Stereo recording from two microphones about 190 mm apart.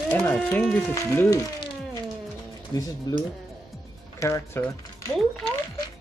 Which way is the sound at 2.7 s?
20° left (ahead or behind).